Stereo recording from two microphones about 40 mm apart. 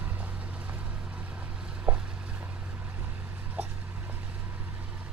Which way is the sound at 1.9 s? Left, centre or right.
Right.